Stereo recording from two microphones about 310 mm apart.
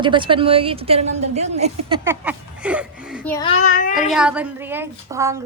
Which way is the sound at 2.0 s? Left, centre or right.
Centre.